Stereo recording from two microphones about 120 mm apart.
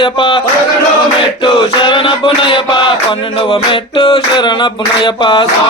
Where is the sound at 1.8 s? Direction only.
45° left (ahead or behind).